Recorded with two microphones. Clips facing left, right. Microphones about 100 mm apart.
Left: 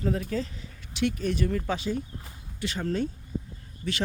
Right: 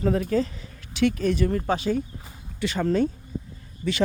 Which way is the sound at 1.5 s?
40° right (ahead or behind).